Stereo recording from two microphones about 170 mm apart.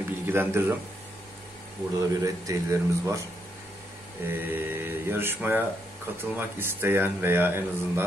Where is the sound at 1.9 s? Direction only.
20° right (ahead or behind).